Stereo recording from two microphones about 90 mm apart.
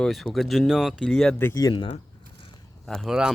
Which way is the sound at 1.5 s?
45° left (ahead or behind).